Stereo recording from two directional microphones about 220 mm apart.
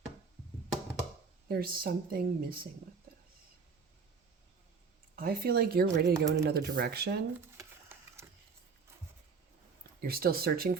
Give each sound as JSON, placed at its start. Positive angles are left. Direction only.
{"t": 1.5, "sound": "a woman's voice", "side_deg": -40}
{"t": 5.1, "sound": "a woman's voice", "side_deg": -45}
{"t": 7.3, "sound": "a sound", "side_deg": -10}
{"t": 10.0, "sound": "a woman's voice", "side_deg": -45}